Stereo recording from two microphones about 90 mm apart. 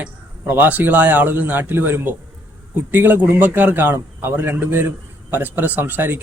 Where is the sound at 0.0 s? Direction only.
20° right (ahead or behind).